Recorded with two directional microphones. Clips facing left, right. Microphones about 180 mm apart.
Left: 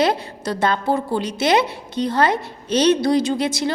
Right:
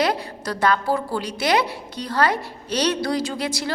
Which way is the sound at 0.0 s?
25° left (ahead or behind).